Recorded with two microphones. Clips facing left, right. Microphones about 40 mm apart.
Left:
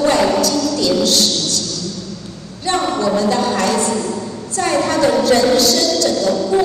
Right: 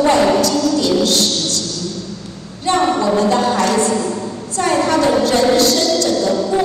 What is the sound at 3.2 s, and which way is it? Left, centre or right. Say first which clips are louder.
Music: right 2 dB; right.